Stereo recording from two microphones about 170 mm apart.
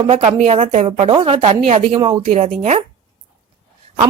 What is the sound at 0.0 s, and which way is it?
A woman's voice, 35° right (ahead or behind).